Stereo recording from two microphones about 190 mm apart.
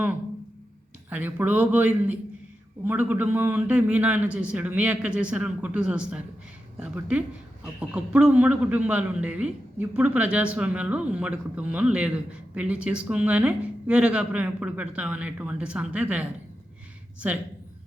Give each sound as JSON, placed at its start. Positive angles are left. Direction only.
{"t": 1.1, "sound": "a woman's voice", "side_deg": -10}
{"t": 17.2, "sound": "a woman's voice", "side_deg": -10}